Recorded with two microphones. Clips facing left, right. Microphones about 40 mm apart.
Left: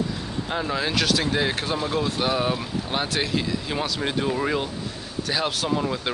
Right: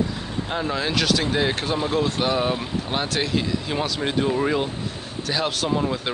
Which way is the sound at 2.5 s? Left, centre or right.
Centre.